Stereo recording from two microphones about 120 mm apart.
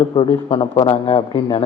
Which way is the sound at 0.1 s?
45° left (ahead or behind).